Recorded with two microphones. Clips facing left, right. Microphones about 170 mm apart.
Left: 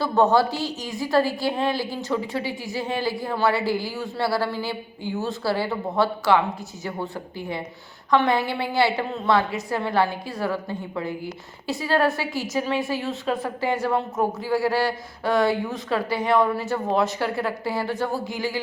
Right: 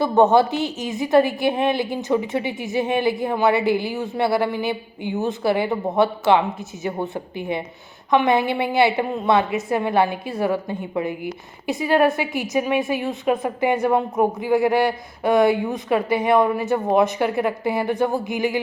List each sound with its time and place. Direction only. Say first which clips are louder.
0.0 s a woman's voice: right 4 dB; 20° right (ahead or behind)